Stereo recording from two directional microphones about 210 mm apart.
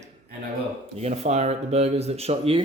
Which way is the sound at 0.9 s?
30° right (ahead or behind).